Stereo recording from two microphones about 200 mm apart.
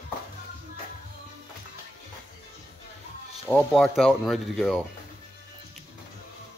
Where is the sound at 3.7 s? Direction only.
Centre (ahead or behind).